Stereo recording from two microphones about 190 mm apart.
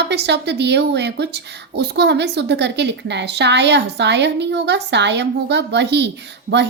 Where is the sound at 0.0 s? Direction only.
60° right (ahead or behind).